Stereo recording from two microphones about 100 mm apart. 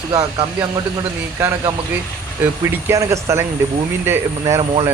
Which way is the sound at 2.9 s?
30° right (ahead or behind).